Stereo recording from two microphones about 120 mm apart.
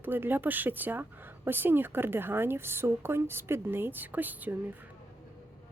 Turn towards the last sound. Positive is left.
turn(degrees=-15)  # may be behind; listen again after turning